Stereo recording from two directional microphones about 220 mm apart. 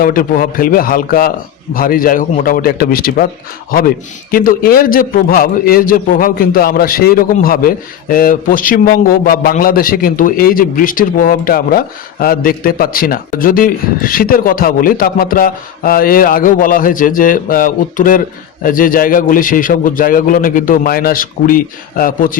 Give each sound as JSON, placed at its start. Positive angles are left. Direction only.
{"t": 0.0, "sound": "a man's voice", "side_deg": 40}